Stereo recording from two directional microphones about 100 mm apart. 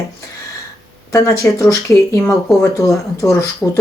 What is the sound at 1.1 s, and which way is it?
Speech, 30° left (ahead or behind).